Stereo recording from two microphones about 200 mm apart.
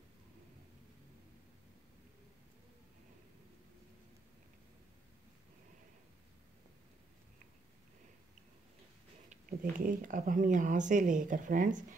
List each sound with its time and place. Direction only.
9.3 s speech: 40° right (ahead or behind)